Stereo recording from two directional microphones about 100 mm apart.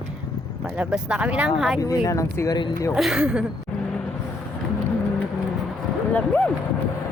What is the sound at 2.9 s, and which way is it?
Speech, 5° right (ahead or behind).